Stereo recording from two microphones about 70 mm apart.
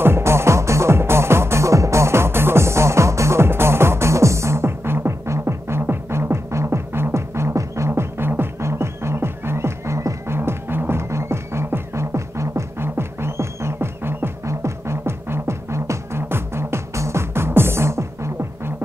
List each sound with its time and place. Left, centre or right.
0.0 s music: right